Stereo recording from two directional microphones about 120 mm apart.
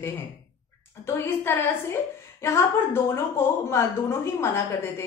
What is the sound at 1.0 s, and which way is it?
A woman's voice, 20° left (ahead or behind).